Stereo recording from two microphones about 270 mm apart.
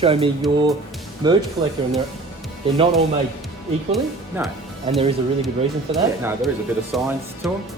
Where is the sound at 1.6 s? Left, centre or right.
Centre.